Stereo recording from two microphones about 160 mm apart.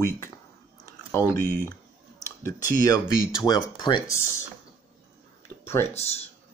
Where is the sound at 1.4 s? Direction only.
15° left (ahead or behind).